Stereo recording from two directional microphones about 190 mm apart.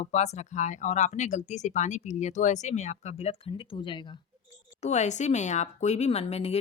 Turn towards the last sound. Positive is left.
turn(degrees=35)  # may be behind; listen again after turning